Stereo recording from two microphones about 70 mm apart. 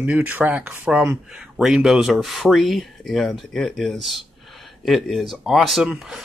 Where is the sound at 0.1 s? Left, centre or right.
Right.